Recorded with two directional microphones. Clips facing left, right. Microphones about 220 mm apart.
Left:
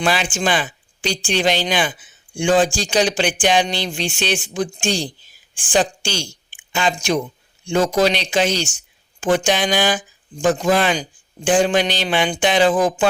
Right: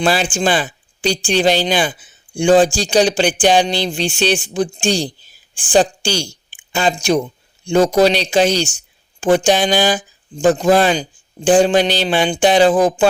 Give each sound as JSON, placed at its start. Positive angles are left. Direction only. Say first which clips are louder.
{"t": 0.0, "sound": "speech", "louder": "right 4 dB", "side_deg": -35}